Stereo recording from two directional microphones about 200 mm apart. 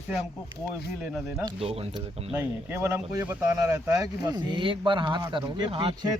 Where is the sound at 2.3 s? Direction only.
10° right (ahead or behind).